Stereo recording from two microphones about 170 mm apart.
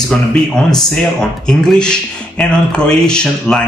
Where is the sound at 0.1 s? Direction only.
5° left (ahead or behind).